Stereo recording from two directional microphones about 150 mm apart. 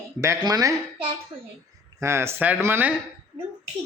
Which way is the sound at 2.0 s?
15° right (ahead or behind).